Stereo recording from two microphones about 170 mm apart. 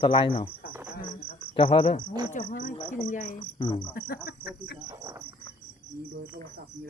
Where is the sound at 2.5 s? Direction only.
60° left (ahead or behind).